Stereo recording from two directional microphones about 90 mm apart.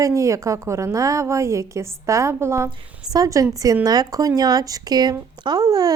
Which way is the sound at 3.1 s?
40° right (ahead or behind).